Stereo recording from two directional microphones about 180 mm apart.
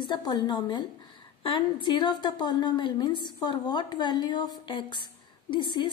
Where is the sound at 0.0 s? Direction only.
25° left (ahead or behind).